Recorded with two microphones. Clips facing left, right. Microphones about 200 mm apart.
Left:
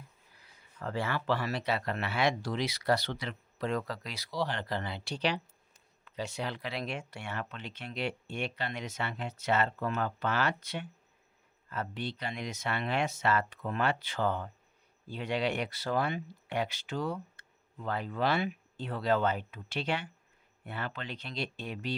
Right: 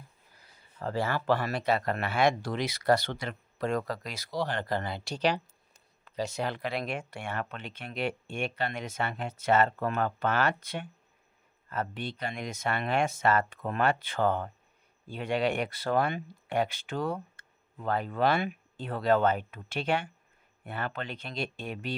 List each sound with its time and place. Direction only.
0.3 s speech: 35° right (ahead or behind)